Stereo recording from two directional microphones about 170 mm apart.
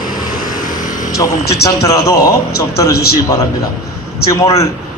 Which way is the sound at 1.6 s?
20° left (ahead or behind).